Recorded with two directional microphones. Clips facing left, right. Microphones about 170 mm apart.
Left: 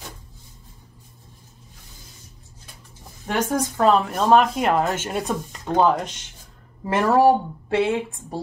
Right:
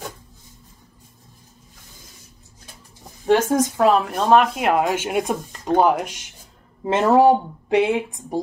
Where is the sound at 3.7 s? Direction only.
5° right (ahead or behind).